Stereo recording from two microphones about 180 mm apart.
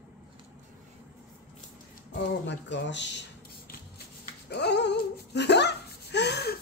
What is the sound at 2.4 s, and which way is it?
Speech, 75° left (ahead or behind).